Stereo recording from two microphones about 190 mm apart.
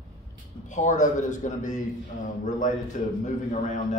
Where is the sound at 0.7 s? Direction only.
40° left (ahead or behind).